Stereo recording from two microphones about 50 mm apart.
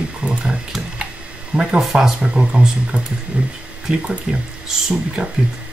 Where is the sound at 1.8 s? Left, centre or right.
Centre.